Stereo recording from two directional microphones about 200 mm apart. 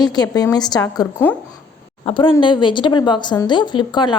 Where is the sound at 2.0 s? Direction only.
25° left (ahead or behind).